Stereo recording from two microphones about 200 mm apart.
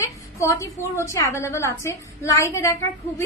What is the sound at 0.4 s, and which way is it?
A woman's voice, 15° left (ahead or behind).